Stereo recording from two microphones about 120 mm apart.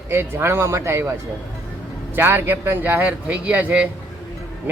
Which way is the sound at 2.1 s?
20° right (ahead or behind).